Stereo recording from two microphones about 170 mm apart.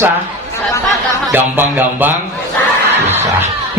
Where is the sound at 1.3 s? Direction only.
10° right (ahead or behind).